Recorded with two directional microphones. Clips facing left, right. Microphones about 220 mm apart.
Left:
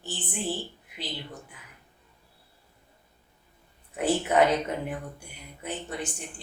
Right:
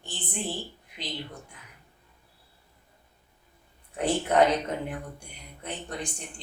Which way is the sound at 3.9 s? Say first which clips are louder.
Even; 5° left (ahead or behind).